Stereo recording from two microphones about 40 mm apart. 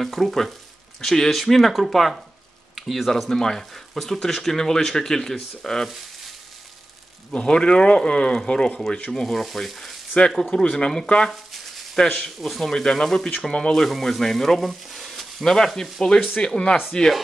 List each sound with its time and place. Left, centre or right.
0.0 s speech: centre
2.7 s a sound: centre
3.1 s speech: centre
7.3 s speech: left
9.1 s speech: centre
9.4 s speech: centre
10.5 s speech: left
11.2 s a sound: centre
12.4 s speech: centre
12.6 s speech: centre
15.4 s speech: centre